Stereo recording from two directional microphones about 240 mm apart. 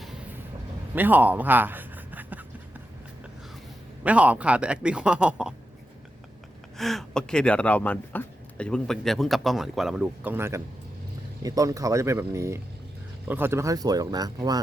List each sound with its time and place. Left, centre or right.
0.9 s a sound: centre
4.0 s speech: centre
6.7 s speech: centre